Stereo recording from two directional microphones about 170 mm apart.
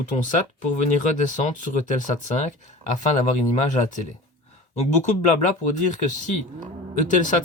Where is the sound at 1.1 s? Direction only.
45° left (ahead or behind).